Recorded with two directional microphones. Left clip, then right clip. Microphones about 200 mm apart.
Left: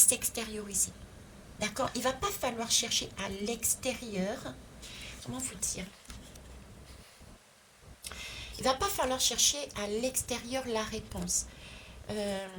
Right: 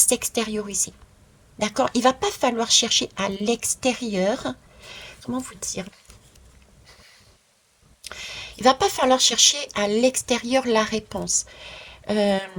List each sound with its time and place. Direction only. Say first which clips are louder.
0.0 s speech: right 9 dB; 40° right (ahead or behind)
8.0 s speech: right 8 dB; 40° right (ahead or behind)